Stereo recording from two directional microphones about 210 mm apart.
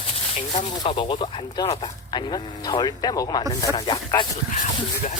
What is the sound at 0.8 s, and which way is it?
Speech, 20° left (ahead or behind).